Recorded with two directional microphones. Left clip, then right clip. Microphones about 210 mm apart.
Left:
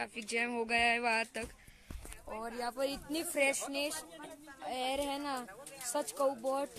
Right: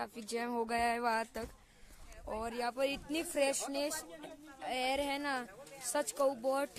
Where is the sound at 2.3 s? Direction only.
15° right (ahead or behind).